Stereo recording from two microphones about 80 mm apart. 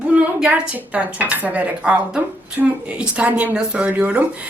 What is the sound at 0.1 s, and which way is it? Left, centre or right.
Speech, centre.